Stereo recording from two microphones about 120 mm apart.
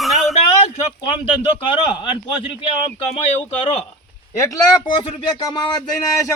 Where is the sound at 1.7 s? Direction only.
45° left (ahead or behind).